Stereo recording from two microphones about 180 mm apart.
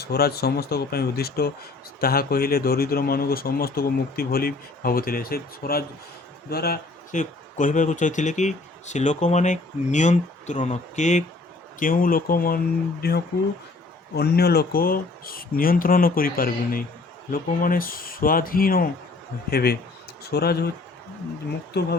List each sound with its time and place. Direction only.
0.0 s speech: 60° left (ahead or behind)